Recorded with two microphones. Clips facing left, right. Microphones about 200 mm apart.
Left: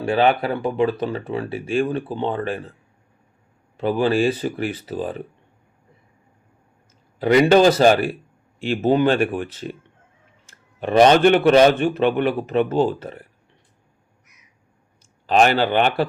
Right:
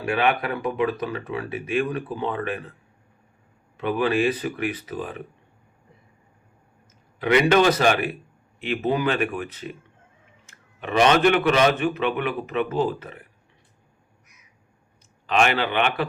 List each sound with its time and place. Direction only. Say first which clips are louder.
0.0 s speech: left 5 dB; 30° left (ahead or behind)
3.8 s a man's voice: left 3 dB; 30° left (ahead or behind)
7.2 s a man's voice: left 4 dB; 35° left (ahead or behind)
15.3 s a man's voice: left 5 dB; 35° left (ahead or behind)